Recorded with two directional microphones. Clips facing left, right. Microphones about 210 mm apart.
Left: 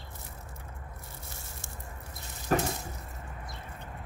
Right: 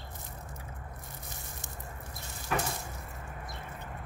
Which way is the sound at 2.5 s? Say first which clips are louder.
Left 5 dB; 40° left (ahead or behind).